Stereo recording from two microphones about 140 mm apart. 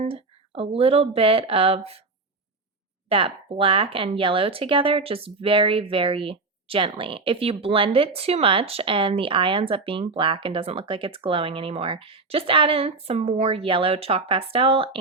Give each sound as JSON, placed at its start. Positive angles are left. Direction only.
{"t": 0.0, "sound": "speech", "side_deg": -40}
{"t": 3.1, "sound": "speech", "side_deg": -40}